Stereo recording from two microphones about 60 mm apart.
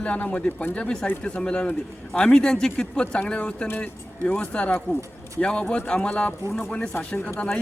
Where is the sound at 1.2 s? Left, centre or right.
Centre.